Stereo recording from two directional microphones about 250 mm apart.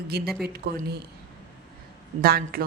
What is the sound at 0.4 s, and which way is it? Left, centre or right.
Speech, right.